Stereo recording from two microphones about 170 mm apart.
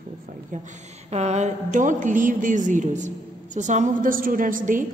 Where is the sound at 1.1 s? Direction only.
40° right (ahead or behind).